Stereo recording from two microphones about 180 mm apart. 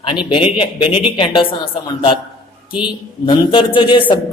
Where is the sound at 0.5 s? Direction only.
30° left (ahead or behind).